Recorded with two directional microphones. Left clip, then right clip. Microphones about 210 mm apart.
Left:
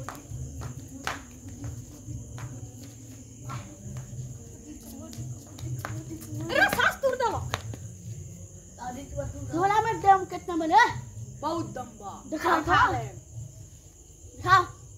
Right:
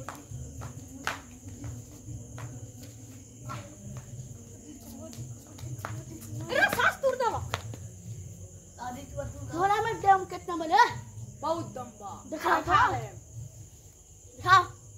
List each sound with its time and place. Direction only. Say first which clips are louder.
1.1 s insect: even; 25° left (ahead or behind)
5.8 s a sound: left 2 dB; 20° left (ahead or behind)
8.7 s cricket: left 2 dB; 45° right (ahead or behind)
9.6 s a sound: left 2 dB; 30° right (ahead or behind)
11.4 s cricket: even; 10° left (ahead or behind)
12.3 s speech: left 1 dB; 20° right (ahead or behind)